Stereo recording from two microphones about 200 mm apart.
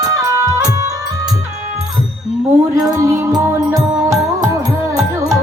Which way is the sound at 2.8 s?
15° right (ahead or behind).